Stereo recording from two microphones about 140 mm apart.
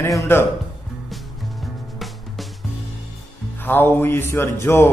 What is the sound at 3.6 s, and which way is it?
A man's voice, 15° left (ahead or behind).